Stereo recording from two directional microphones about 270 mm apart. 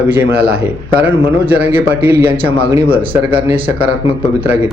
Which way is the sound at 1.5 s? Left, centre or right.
Centre.